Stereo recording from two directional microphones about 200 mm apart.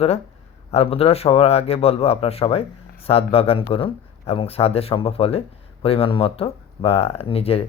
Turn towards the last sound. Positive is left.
turn(degrees=30)  # may be behind; listen again after turning